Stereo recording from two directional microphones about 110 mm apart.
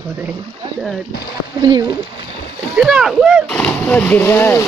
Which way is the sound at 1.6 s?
40° right (ahead or behind).